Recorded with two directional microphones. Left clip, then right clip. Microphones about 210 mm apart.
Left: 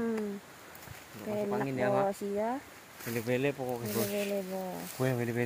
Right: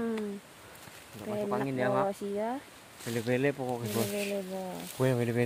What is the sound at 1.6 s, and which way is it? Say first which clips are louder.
Speech: even; 15° right (ahead or behind).